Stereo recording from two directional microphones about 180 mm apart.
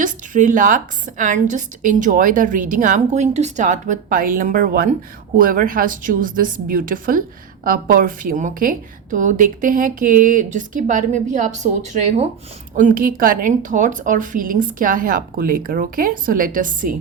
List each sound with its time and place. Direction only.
0.0 s a woman's voice: 45° right (ahead or behind)
12.7 s a woman's voice: 45° right (ahead or behind)